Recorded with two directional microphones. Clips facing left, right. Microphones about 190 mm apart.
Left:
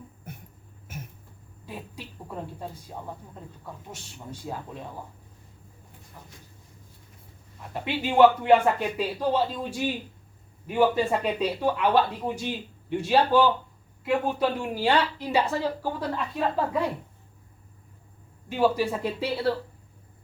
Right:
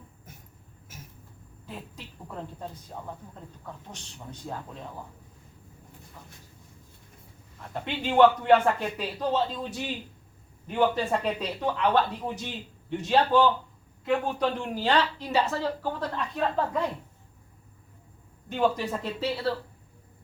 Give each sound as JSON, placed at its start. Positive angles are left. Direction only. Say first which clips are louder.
{"t": 0.3, "sound": "a sound", "louder": "left 9 dB", "side_deg": 60}
{"t": 3.7, "sound": "speech", "louder": "left 1 dB", "side_deg": 10}
{"t": 7.7, "sound": "speech", "louder": "left 2 dB", "side_deg": 5}
{"t": 18.4, "sound": "speech", "louder": "left 3 dB", "side_deg": 5}